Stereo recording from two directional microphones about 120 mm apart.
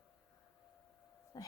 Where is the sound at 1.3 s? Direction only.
30° left (ahead or behind).